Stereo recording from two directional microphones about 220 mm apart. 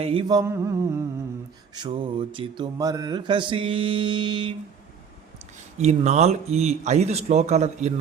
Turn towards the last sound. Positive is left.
turn(degrees=-30)  # may be behind; listen again after turning